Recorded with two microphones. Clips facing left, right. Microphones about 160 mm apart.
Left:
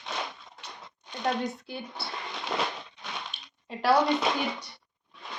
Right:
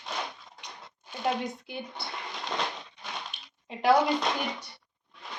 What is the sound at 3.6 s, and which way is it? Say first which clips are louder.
Speech: right 1 dB; 15° right (ahead or behind).